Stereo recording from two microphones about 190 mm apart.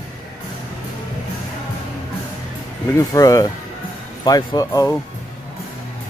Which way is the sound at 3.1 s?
20° left (ahead or behind).